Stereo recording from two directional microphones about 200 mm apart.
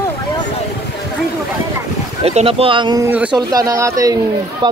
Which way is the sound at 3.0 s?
10° right (ahead or behind).